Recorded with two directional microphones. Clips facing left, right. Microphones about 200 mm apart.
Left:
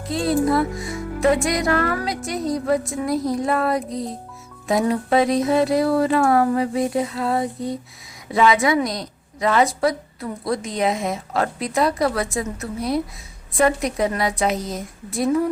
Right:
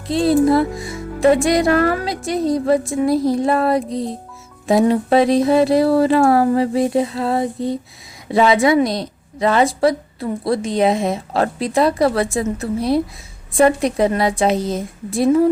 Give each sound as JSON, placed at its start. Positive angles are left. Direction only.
{"t": 0.1, "sound": "a woman's voice", "side_deg": -25}